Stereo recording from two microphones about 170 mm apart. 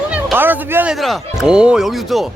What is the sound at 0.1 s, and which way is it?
Speech, 10° right (ahead or behind).